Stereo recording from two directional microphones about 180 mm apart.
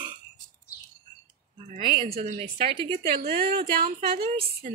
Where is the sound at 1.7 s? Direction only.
40° right (ahead or behind).